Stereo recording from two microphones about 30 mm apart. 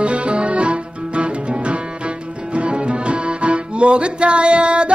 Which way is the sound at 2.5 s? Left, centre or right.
Right.